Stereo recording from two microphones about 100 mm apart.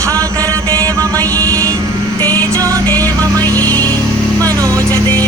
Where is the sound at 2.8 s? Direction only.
15° left (ahead or behind).